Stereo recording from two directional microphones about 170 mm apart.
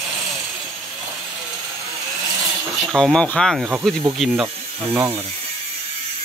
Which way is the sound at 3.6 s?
10° right (ahead or behind).